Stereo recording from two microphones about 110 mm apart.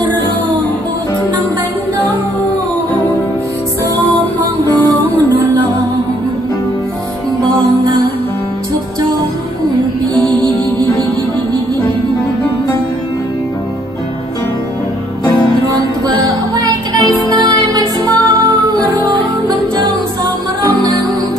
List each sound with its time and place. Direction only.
4.6 s music: 15° left (ahead or behind)
10.1 s music: 5° left (ahead or behind)
16.2 s music: 35° right (ahead or behind)